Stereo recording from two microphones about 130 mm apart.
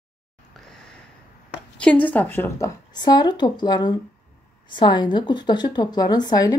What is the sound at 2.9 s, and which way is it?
A woman's voice, 35° left (ahead or behind).